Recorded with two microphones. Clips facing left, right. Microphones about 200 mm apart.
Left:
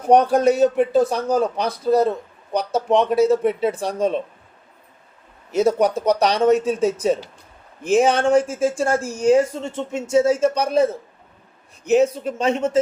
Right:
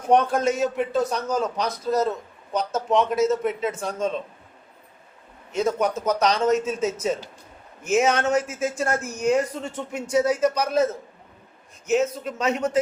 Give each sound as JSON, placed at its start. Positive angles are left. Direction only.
{"t": 0.1, "sound": "a man's voice", "side_deg": 35}
{"t": 5.5, "sound": "a man's voice", "side_deg": 35}
{"t": 11.9, "sound": "speech", "side_deg": 35}